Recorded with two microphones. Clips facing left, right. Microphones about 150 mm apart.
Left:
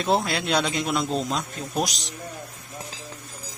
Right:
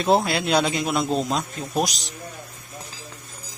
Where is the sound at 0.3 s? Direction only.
5° right (ahead or behind).